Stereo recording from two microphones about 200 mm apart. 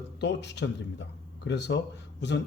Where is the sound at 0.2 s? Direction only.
60° left (ahead or behind).